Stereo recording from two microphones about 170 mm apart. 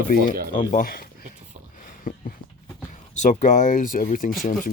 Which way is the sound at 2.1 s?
50° left (ahead or behind).